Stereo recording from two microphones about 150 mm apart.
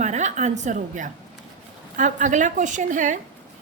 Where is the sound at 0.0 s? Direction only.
50° right (ahead or behind).